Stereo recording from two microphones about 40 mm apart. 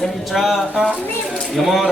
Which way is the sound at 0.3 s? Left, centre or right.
Centre.